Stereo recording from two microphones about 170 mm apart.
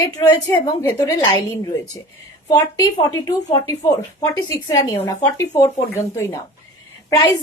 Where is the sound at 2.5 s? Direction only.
20° left (ahead or behind).